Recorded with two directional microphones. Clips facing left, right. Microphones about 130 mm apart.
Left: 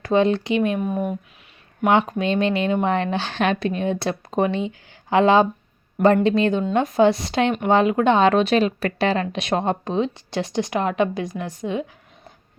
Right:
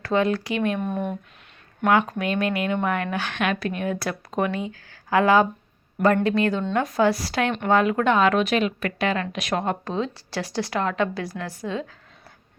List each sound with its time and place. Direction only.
0.0 s speech: 20° left (ahead or behind)
0.8 s speech: 5° left (ahead or behind)
1.9 s speech: 25° left (ahead or behind)